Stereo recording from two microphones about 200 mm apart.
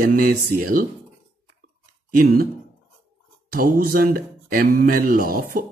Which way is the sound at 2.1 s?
45° right (ahead or behind).